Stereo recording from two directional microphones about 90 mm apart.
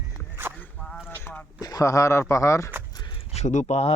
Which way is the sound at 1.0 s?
25° left (ahead or behind).